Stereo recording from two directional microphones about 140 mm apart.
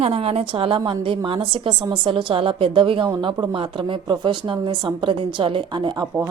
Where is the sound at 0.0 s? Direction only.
45° right (ahead or behind).